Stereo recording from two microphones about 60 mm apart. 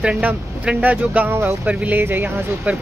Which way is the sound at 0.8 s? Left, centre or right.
Right.